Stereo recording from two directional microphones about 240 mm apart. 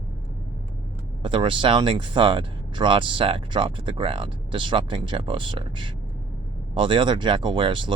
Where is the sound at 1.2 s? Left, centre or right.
Right.